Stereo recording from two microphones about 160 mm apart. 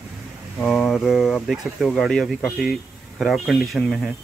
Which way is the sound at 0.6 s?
5° left (ahead or behind).